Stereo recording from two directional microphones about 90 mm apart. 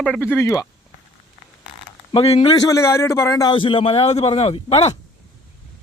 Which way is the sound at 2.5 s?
40° left (ahead or behind).